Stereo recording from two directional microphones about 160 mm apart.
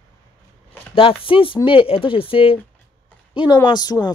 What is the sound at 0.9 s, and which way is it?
Speech, 35° left (ahead or behind).